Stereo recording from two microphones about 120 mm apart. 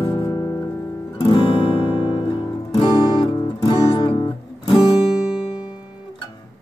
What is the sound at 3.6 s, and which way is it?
Music, 45° left (ahead or behind).